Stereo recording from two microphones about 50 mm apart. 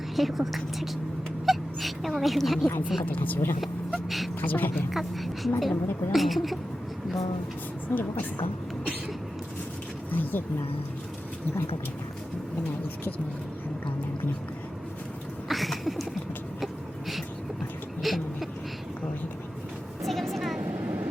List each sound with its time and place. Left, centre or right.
0.2 s a woman's voice: centre
3.1 s a woman's voice: left
4.9 s a woman's voice: centre
7.9 s speech: left
10.1 s speech: left
15.4 s a sound: centre
18.0 s a sound: centre
20.0 s vehicle: centre
20.6 s vehicle: right